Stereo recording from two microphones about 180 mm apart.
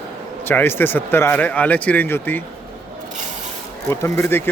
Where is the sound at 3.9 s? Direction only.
15° left (ahead or behind).